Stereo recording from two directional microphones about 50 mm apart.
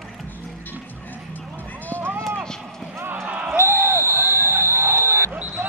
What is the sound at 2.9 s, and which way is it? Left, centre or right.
Basketball bounce, right.